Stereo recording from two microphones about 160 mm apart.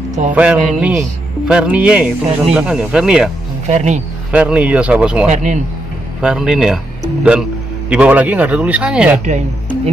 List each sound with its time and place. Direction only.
0.3 s speech: 10° right (ahead or behind)
3.6 s speech: 45° right (ahead or behind)
4.3 s speech: 10° right (ahead or behind)
5.3 s speech: 50° right (ahead or behind)
6.2 s speech: 5° right (ahead or behind)
7.9 s speech: 10° right (ahead or behind)